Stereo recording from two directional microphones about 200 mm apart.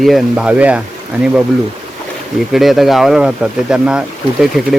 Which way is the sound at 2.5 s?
Centre (ahead or behind).